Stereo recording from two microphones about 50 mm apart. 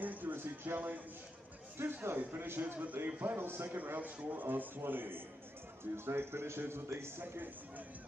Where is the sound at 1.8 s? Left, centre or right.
Right.